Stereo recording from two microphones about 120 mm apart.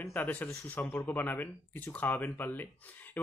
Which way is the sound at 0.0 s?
15° left (ahead or behind).